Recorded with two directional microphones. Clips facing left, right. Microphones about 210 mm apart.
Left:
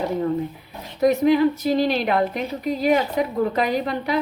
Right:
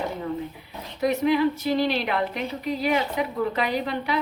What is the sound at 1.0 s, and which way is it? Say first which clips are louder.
A woman's voice: left 5 dB; 45° left (ahead or behind).